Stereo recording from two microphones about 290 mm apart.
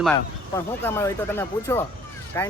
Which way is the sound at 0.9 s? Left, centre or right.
Centre.